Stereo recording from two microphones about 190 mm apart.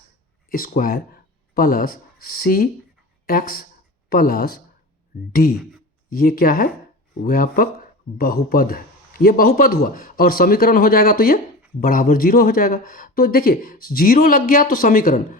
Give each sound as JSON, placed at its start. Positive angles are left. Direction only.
{"t": 0.5, "sound": "speech", "side_deg": 50}